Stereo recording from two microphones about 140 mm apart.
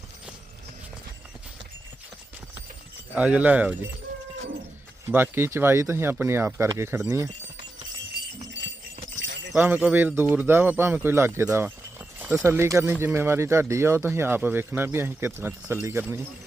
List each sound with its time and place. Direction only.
3.2 s speech: 10° right (ahead or behind)
5.1 s speech: 15° right (ahead or behind)
9.5 s speech: 10° right (ahead or behind)